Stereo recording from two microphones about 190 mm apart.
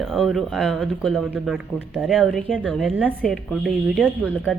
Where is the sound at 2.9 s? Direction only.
10° right (ahead or behind).